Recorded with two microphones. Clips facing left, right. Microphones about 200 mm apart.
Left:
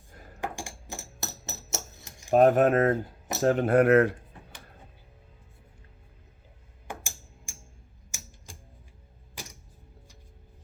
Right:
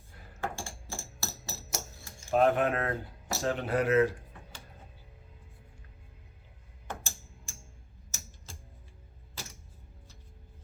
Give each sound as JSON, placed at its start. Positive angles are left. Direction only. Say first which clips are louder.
{"t": 0.3, "sound": "music", "louder": "left 2 dB", "side_deg": 15}
{"t": 2.3, "sound": "speech", "louder": "left 6 dB", "side_deg": 45}
{"t": 6.8, "sound": "a sound", "louder": "left 1 dB", "side_deg": 10}
{"t": 8.1, "sound": "typewriter", "louder": "left 1 dB", "side_deg": 10}
{"t": 8.5, "sound": "music", "louder": "left 1 dB", "side_deg": 15}
{"t": 9.3, "sound": "creak", "louder": "left 2 dB", "side_deg": 15}